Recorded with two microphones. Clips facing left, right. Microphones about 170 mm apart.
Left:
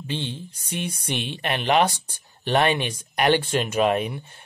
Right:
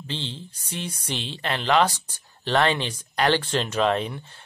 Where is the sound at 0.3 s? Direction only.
15° left (ahead or behind).